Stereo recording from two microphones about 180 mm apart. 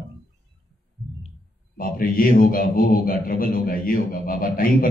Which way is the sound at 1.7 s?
50° left (ahead or behind).